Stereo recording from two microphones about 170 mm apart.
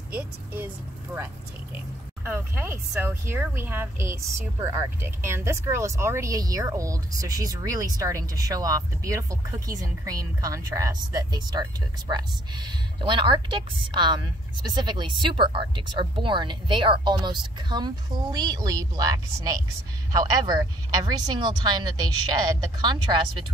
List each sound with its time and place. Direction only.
2.2 s a woman's voice: 15° right (ahead or behind)